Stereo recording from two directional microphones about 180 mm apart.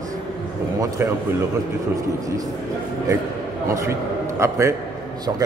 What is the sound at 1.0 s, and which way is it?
Speech, 10° right (ahead or behind).